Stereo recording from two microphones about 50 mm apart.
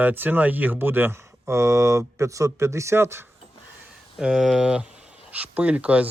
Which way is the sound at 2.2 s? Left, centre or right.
Right.